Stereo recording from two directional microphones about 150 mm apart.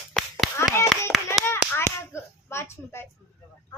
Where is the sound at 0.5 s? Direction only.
15° left (ahead or behind).